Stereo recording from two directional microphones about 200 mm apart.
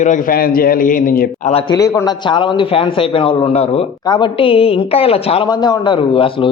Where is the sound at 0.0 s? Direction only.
40° left (ahead or behind).